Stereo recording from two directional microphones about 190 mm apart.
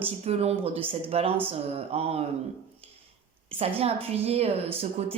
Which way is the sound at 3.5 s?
30° right (ahead or behind).